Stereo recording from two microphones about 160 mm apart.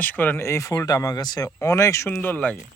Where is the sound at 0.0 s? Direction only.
10° left (ahead or behind).